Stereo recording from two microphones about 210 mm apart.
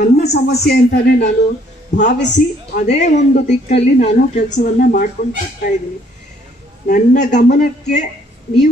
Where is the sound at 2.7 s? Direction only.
35° left (ahead or behind).